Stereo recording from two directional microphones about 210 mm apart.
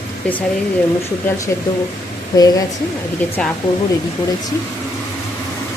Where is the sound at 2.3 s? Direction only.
15° left (ahead or behind).